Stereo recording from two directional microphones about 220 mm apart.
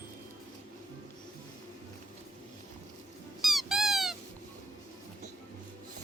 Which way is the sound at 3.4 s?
Centre (ahead or behind).